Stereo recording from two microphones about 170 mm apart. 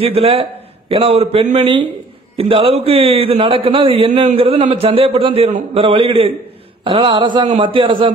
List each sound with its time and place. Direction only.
0.0 s a man's voice: 35° right (ahead or behind)